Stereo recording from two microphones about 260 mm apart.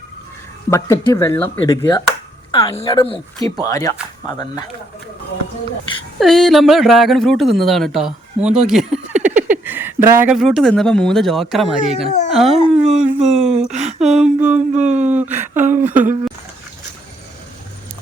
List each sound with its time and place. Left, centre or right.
0.7 s a woman's voice: centre
6.1 s speech: centre
12.0 s speech: left
12.3 s a sound: centre